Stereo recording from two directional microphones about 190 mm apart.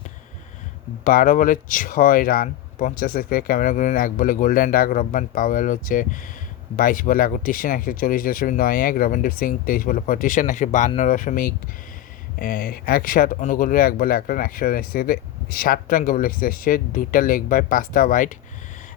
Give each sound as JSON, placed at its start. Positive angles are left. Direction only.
{"t": 1.0, "sound": "speech", "side_deg": 45}